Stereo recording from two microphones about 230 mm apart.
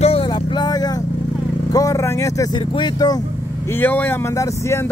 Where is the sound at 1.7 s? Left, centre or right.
Centre.